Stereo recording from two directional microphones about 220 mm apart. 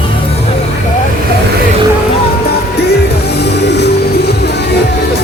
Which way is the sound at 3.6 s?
50° left (ahead or behind).